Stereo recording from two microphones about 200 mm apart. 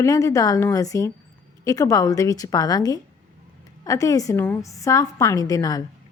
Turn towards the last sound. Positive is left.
turn(degrees=20)  # may be behind; listen again after turning